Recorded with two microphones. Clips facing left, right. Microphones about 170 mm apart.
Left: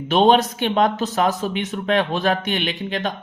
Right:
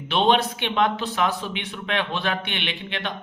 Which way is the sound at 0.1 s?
45° left (ahead or behind).